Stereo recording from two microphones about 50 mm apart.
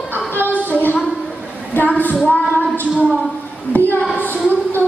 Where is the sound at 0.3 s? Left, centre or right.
Left.